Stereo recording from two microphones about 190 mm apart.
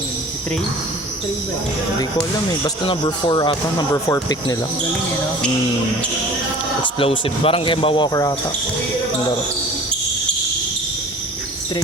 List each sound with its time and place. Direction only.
2.6 s speech: 25° left (ahead or behind)
7.0 s speech: 30° left (ahead or behind)